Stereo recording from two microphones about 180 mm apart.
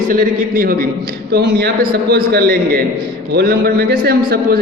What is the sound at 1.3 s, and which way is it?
A man's voice, 65° right (ahead or behind).